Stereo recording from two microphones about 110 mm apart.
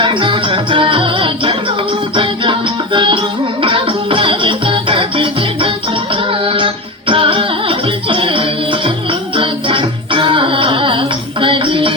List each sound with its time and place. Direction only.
0.0 s music: 50° right (ahead or behind)